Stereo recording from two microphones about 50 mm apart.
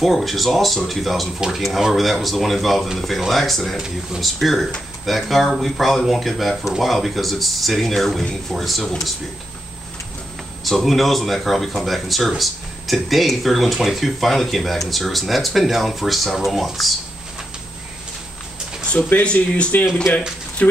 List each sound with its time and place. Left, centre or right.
0.0 s speech: centre
10.6 s speech: centre
19.2 s speech: left